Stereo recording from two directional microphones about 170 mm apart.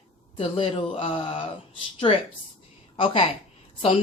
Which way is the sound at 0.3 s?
35° left (ahead or behind).